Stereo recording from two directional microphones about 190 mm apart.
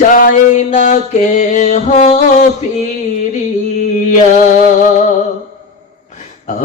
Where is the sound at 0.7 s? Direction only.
40° left (ahead or behind).